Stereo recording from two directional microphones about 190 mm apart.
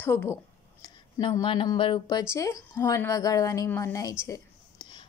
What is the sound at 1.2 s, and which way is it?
A woman's voice, 25° left (ahead or behind).